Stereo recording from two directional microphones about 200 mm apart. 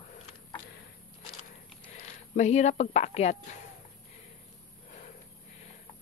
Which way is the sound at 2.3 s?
35° left (ahead or behind).